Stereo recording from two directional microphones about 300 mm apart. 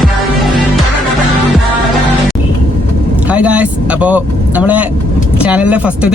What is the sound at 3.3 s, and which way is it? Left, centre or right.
Speech, centre.